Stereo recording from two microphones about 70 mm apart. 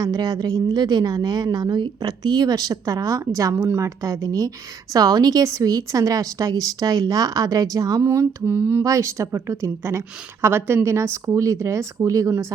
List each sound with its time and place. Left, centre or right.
0.0 s speech: right
0.8 s a woman's voice: right
3.5 s speech: right
8.0 s mantra: right
8.8 s speech: right
10.4 s mantra: right
10.8 s speech: right